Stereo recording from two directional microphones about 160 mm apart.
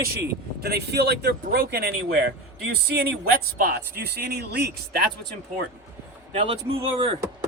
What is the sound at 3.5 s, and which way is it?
Speech, 70° right (ahead or behind).